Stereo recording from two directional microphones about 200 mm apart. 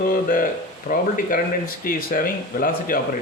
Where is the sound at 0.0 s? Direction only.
45° left (ahead or behind).